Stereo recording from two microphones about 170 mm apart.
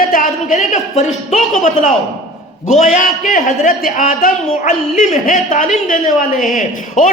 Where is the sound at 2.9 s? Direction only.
50° left (ahead or behind).